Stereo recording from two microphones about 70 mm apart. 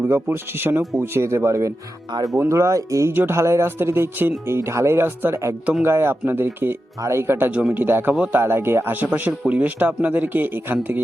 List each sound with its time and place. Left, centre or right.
0.0 s speech: right
3.1 s speech: right
7.5 s speech: right